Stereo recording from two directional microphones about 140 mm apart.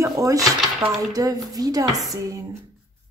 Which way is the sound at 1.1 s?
25° right (ahead or behind).